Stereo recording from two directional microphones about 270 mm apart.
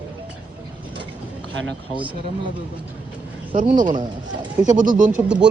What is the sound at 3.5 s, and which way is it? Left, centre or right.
Speech, right.